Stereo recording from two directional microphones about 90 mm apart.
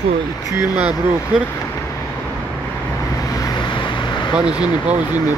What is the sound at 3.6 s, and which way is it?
Vehicle, 65° left (ahead or behind).